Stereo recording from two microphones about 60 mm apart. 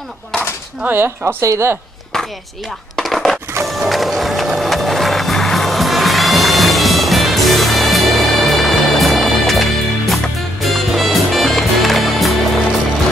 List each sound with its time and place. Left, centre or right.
0.8 s speech: right
1.4 s speech: right
2.1 s a sound: centre
3.6 s music: centre